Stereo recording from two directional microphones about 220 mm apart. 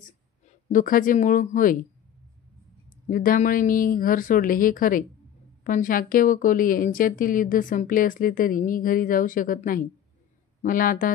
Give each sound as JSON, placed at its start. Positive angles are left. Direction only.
{"t": 0.0, "sound": "speech", "side_deg": 35}
{"t": 3.1, "sound": "speech", "side_deg": 40}